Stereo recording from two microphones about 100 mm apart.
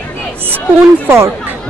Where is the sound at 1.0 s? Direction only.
25° right (ahead or behind).